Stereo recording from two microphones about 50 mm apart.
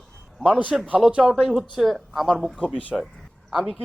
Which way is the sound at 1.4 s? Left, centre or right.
Centre.